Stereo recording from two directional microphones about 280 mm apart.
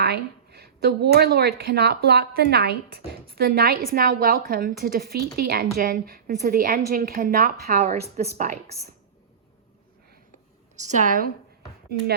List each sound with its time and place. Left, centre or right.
0.0 s a woman's voice: right
8.7 s speech: centre
10.8 s a woman's voice: right